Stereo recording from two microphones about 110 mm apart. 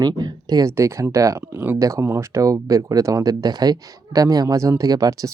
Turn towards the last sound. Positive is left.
turn(degrees=-35)  # may be behind; listen again after turning